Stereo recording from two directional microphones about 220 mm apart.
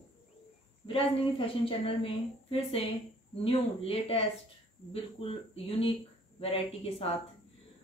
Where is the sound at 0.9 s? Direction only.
25° left (ahead or behind).